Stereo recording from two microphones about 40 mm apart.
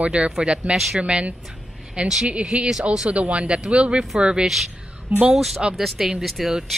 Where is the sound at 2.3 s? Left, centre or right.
Right.